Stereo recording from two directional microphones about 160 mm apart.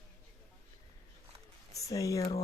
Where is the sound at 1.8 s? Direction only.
20° left (ahead or behind).